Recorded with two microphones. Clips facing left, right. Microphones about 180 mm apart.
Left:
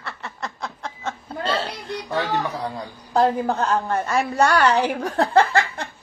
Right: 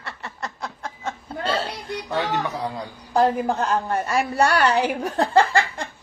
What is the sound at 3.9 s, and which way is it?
Speech, 30° right (ahead or behind).